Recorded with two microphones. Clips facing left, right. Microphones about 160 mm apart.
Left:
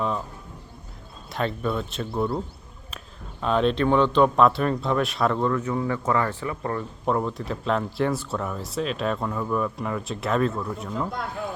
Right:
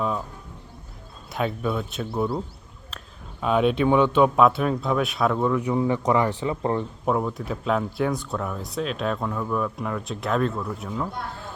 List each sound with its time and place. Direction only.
1.3 s speech: 5° right (ahead or behind)
3.4 s speech: 10° right (ahead or behind)
7.0 s speech: 5° right (ahead or behind)